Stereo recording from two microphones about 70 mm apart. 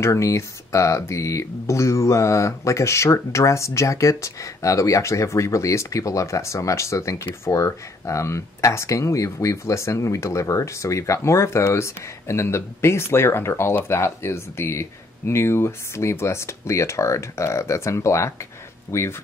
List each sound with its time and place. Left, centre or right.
0.0 s speech: left